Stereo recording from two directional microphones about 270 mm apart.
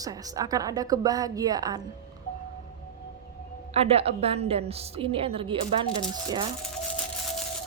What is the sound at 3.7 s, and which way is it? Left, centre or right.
A woman's voice, right.